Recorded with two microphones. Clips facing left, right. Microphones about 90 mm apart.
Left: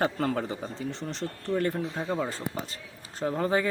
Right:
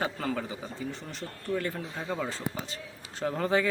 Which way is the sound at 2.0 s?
15° left (ahead or behind).